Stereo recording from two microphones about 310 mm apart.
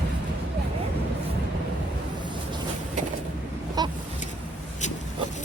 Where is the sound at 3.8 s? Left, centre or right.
Centre.